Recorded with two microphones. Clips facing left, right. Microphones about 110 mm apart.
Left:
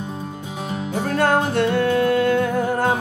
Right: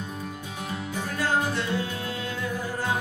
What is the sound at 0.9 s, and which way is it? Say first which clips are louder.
Music: left 8 dB; 60° left (ahead or behind).